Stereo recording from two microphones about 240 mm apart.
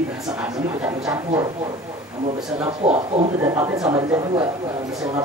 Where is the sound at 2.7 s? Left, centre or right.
Right.